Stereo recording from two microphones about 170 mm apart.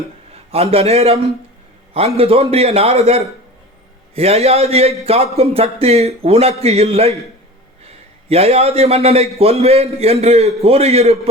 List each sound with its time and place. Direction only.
0.5 s speech: 35° right (ahead or behind)
8.3 s speech: 40° right (ahead or behind)